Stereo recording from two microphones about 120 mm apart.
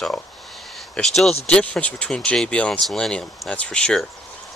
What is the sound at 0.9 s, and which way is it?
Speech, 5° left (ahead or behind).